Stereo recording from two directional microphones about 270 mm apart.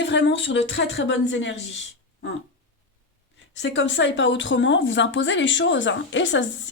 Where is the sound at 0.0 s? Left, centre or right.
Left.